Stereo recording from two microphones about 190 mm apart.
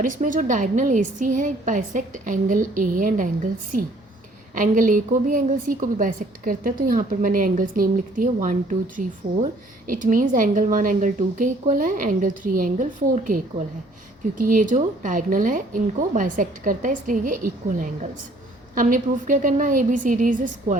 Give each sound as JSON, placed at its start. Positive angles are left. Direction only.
{"t": 0.0, "sound": "a woman's voice", "side_deg": -45}
{"t": 4.5, "sound": "a woman's voice", "side_deg": -45}